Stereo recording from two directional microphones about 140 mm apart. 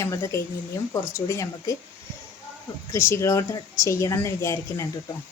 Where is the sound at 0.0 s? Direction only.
20° left (ahead or behind).